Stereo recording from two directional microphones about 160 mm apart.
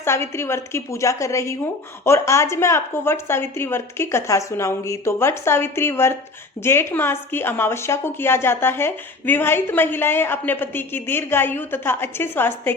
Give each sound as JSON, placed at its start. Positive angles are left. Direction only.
{"t": 0.0, "sound": "a woman's voice", "side_deg": 15}